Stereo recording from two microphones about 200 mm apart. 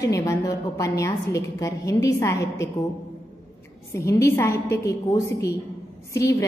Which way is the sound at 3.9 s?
15° left (ahead or behind).